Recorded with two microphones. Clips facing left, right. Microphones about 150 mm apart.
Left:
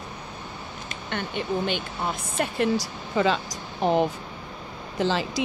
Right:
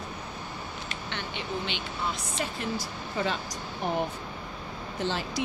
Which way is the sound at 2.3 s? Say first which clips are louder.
Left 8 dB; 60° left (ahead or behind).